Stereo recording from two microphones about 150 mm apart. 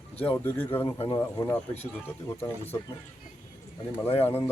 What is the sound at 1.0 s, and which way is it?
Speech, 25° left (ahead or behind).